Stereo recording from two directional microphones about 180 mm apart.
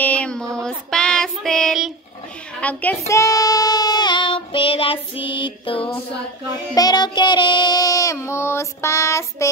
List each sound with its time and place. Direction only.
0.0 s music: 5° left (ahead or behind)
2.6 s child singing: 10° left (ahead or behind)